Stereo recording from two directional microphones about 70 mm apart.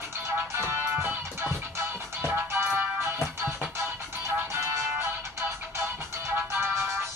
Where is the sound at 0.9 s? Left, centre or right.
Right.